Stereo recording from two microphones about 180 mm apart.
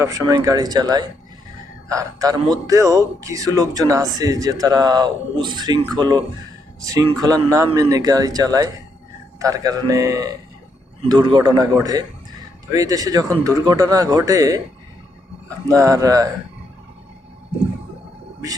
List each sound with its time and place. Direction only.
0.0 s speech: 20° right (ahead or behind)
7.5 s speech: 15° right (ahead or behind)